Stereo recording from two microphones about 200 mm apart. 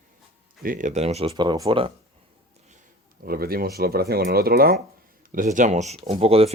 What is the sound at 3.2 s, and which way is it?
Speech, 50° right (ahead or behind).